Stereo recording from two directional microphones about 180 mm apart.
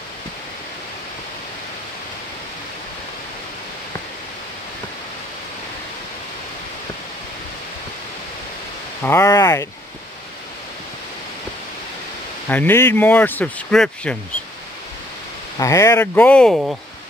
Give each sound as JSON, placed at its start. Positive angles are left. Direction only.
{"t": 9.0, "sound": "speech", "side_deg": 15}
{"t": 12.4, "sound": "speech", "side_deg": 10}
{"t": 15.6, "sound": "speech", "side_deg": 20}